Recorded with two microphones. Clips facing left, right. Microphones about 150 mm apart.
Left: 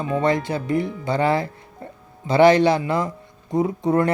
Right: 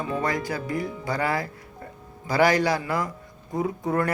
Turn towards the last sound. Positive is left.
turn(degrees=20)  # may be behind; listen again after turning